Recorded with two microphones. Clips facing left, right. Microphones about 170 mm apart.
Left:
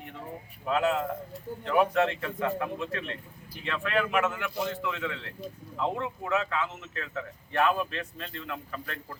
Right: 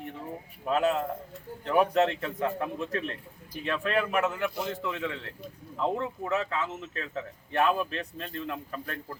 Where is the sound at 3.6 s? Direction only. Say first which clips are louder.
Right 1 dB; 35° right (ahead or behind).